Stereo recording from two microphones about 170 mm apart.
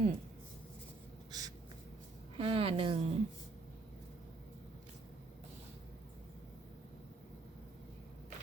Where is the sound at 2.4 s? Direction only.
30° right (ahead or behind).